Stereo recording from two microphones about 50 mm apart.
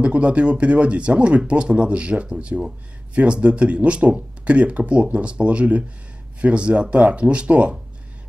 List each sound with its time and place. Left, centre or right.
0.0 s speech: right